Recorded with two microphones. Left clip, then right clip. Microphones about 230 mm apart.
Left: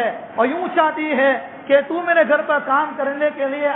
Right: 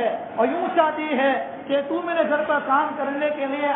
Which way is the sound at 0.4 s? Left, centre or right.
Left.